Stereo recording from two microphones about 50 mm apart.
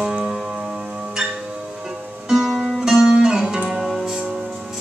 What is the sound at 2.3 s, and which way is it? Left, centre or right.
Music, centre.